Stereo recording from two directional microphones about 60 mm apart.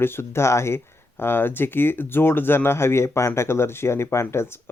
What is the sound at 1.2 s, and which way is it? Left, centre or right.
Speech, left.